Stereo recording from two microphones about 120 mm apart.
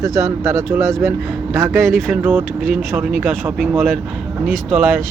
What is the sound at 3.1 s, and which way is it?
Speech, 15° right (ahead or behind).